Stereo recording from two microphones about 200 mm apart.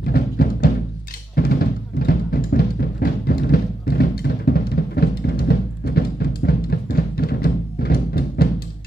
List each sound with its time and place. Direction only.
0.0 s music: 45° left (ahead or behind)